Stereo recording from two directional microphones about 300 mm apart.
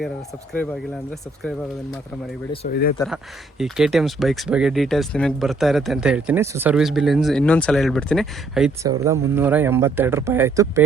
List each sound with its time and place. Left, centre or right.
2.6 s speech: left
3.6 s speech: centre